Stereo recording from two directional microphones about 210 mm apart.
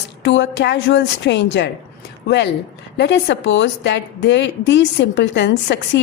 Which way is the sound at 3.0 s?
55° left (ahead or behind).